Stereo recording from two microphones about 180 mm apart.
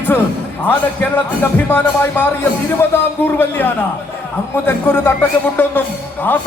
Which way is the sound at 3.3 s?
10° left (ahead or behind).